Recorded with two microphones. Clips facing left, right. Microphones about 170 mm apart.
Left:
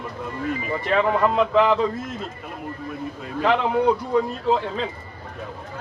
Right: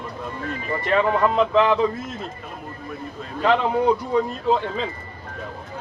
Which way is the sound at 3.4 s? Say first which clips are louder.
Right 1 dB; centre (ahead or behind).